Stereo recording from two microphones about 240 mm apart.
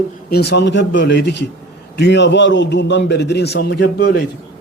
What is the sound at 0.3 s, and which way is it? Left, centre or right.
A man's voice, left.